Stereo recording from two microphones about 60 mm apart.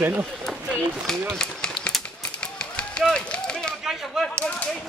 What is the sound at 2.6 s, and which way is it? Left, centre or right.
Run, centre.